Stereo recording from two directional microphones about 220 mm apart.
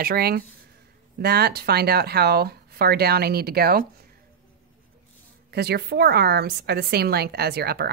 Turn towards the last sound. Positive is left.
turn(degrees=-45)  # may be behind; listen again after turning